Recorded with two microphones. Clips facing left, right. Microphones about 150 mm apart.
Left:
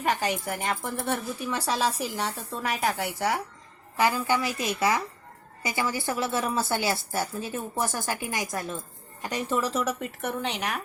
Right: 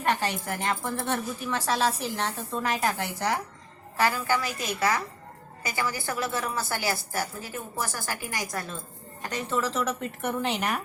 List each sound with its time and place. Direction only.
0.0 s speech: 10° left (ahead or behind)
3.9 s a woman's voice: 20° left (ahead or behind)
10.2 s speech: centre (ahead or behind)